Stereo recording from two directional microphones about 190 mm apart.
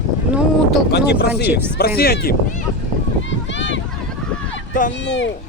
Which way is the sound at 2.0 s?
55° left (ahead or behind).